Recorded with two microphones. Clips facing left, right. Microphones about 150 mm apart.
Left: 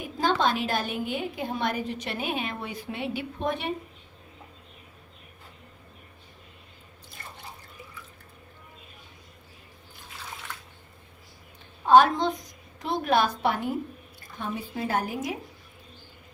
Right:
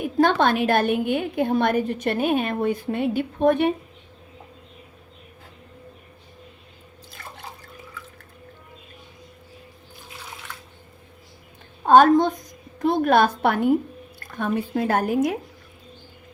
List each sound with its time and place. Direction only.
0.0 s a woman's voice: 60° right (ahead or behind)
7.2 s drip: 90° right
11.9 s a woman's voice: 50° right (ahead or behind)